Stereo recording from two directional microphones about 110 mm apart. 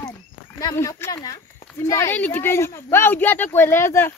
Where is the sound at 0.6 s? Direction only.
30° left (ahead or behind).